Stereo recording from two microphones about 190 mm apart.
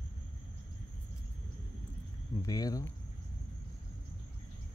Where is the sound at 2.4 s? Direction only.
20° left (ahead or behind).